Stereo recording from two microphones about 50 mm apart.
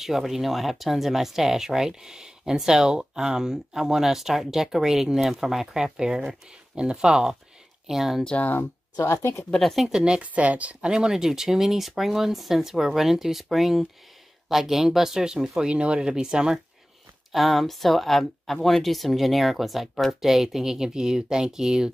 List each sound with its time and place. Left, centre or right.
0.0 s speech: centre
9.0 s speech: left
9.6 s speech: centre
9.8 s speech: centre
10.3 s speech: right
10.9 s speech: centre
15.7 s speech: right
17.3 s speech: centre